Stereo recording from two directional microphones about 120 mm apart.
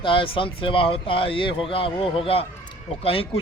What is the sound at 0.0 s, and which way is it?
A man's voice, 45° left (ahead or behind).